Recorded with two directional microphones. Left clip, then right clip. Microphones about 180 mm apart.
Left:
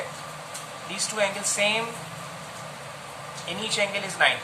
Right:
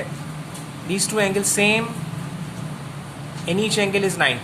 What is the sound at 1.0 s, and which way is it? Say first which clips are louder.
Speech: right 5 dB; 50° right (ahead or behind).